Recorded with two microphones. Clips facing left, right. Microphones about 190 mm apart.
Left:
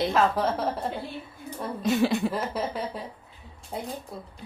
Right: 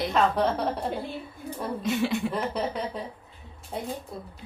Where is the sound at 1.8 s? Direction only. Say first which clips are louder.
Left 4 dB; 40° left (ahead or behind).